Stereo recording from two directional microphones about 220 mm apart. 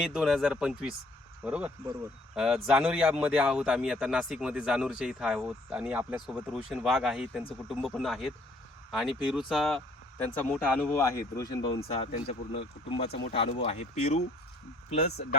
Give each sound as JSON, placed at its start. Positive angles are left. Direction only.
{"t": 0.0, "sound": "speech", "side_deg": 0}
{"t": 12.3, "sound": "speech", "side_deg": 25}